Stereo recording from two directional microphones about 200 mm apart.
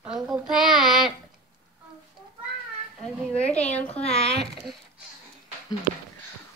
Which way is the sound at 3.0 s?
5° left (ahead or behind).